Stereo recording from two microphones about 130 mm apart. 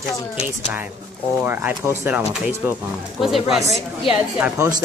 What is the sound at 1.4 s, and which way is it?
Speech, 15° right (ahead or behind).